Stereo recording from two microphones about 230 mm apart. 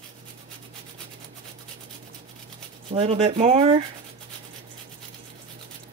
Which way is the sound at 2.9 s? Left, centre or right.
Right.